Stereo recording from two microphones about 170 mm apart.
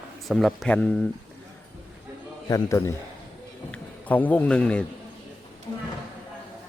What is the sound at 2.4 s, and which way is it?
Speech, 20° left (ahead or behind).